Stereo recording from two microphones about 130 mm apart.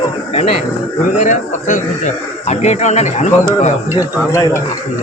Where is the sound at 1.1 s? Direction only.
70° left (ahead or behind).